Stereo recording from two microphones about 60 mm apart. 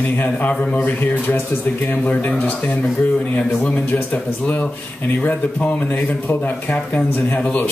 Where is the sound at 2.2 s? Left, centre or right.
Left.